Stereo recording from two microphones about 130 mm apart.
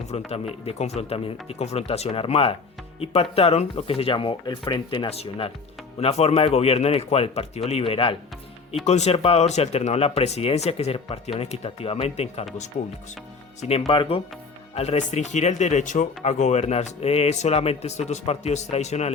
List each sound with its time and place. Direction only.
0.1 s speech: 55° left (ahead or behind)
8.8 s speech: 60° left (ahead or behind)
13.6 s speech: 50° left (ahead or behind)
14.8 s speech: 60° left (ahead or behind)